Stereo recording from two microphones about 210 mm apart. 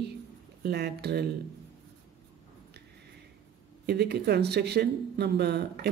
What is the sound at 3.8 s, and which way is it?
Speech, 50° right (ahead or behind).